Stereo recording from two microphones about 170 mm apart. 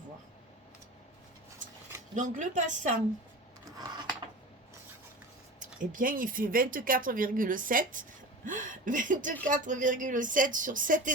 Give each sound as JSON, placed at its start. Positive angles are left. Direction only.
{"t": 2.1, "sound": "speech", "side_deg": -45}
{"t": 5.5, "sound": "speech", "side_deg": -50}